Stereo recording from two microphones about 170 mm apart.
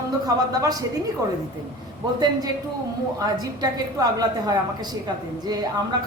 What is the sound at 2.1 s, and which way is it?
A woman's voice, 25° right (ahead or behind).